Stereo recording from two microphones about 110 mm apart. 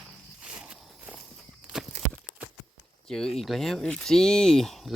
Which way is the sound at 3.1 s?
5° left (ahead or behind).